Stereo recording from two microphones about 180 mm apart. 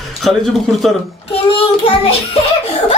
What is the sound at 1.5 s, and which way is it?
Child singing, 30° left (ahead or behind).